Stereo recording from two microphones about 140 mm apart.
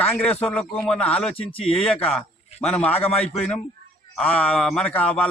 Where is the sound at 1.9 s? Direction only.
5° left (ahead or behind).